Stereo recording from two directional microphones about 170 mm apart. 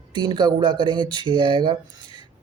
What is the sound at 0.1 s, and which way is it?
Speech, 25° right (ahead or behind).